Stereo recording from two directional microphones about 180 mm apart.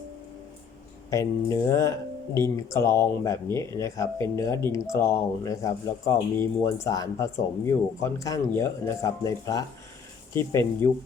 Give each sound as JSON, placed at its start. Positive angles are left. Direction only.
{"t": 1.1, "sound": "speech", "side_deg": 15}